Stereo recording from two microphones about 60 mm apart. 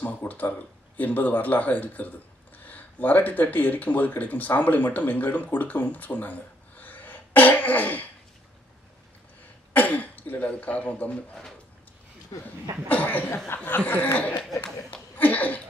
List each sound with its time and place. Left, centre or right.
0.0 s speech: left
6.8 s throat clearing: left
9.8 s speech: left
12.8 s speech: left
14.6 s chuckle: left